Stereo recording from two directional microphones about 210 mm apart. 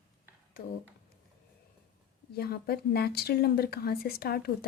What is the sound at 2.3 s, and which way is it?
A woman's voice, 50° left (ahead or behind).